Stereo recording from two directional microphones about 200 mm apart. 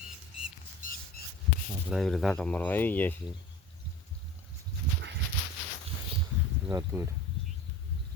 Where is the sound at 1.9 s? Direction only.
Centre (ahead or behind).